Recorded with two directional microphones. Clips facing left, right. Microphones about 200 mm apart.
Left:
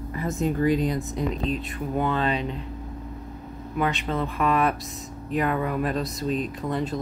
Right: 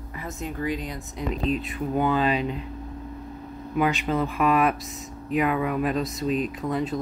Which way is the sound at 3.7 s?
5° right (ahead or behind).